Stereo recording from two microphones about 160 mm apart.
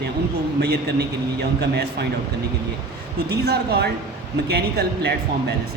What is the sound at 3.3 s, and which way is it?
A man's voice, 90° right.